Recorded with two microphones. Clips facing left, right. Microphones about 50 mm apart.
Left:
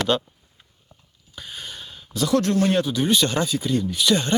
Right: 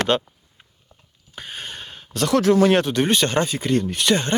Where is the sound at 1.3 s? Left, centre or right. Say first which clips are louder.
Right 3 dB; right.